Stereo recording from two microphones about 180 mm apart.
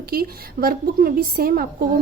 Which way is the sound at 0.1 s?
55° right (ahead or behind).